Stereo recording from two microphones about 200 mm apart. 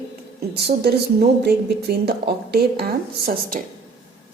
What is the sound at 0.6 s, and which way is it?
Speech, 55° right (ahead or behind).